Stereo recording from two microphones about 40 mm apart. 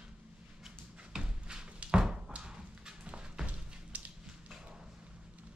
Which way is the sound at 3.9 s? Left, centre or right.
Right.